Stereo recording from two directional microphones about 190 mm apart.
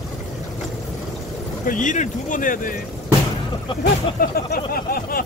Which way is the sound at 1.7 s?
40° left (ahead or behind).